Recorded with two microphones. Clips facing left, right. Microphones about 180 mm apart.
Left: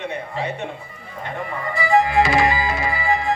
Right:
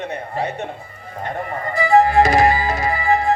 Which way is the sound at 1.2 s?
45° right (ahead or behind).